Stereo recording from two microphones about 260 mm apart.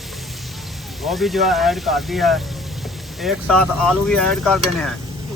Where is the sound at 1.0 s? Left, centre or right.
Centre.